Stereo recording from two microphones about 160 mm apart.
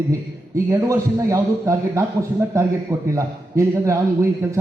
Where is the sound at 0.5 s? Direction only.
20° right (ahead or behind).